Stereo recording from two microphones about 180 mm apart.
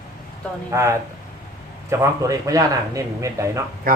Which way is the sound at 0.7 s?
15° right (ahead or behind).